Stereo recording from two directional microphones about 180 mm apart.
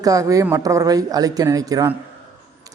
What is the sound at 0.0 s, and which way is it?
Speech, 20° right (ahead or behind).